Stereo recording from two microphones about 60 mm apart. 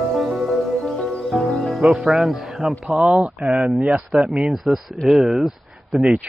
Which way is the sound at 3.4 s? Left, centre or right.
Centre.